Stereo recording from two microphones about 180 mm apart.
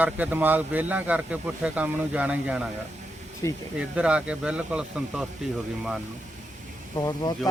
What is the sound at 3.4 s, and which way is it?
Speech, 15° left (ahead or behind).